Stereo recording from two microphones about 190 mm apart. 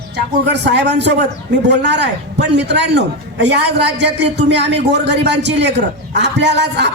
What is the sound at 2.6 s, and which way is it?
A man's voice, 65° right (ahead or behind).